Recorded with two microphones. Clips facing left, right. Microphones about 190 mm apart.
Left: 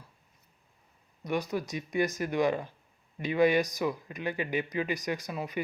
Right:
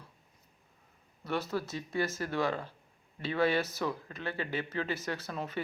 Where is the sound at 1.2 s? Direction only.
15° left (ahead or behind).